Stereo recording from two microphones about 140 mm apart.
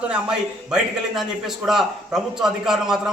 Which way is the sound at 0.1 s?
5° right (ahead or behind).